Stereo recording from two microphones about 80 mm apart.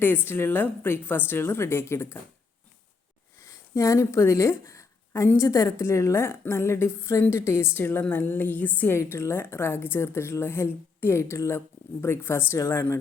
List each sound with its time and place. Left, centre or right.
0.3 s a woman's voice: left
3.4 s a sound: left
5.4 s a woman's voice: left
5.8 s a woman's voice: left
9.0 s a woman's voice: left